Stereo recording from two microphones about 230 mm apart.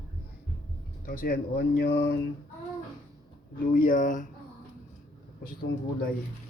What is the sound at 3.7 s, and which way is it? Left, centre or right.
Speech, left.